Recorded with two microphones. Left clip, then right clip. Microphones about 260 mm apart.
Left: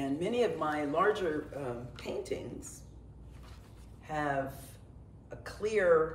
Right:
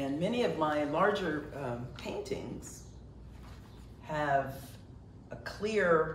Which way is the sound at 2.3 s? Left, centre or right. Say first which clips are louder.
Even; centre.